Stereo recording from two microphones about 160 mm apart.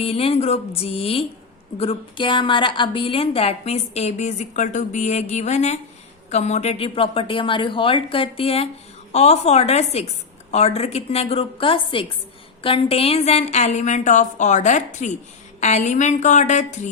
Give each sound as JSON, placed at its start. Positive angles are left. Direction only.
{"t": 0.0, "sound": "a woman's voice", "side_deg": 40}